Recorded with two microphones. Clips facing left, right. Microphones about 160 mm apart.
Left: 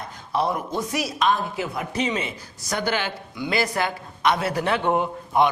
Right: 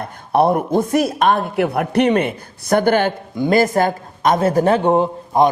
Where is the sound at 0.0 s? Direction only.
55° right (ahead or behind).